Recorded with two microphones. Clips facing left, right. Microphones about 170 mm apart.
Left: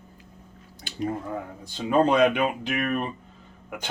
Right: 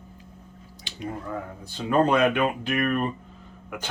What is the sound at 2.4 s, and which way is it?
Speech, 10° left (ahead or behind).